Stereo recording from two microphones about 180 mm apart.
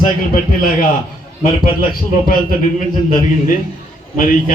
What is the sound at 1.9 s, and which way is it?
Speech, 50° left (ahead or behind).